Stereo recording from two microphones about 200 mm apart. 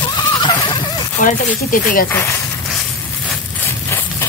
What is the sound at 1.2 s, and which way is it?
Speech, 40° left (ahead or behind).